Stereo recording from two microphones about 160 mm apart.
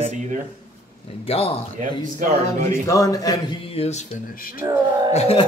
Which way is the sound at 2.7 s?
20° left (ahead or behind).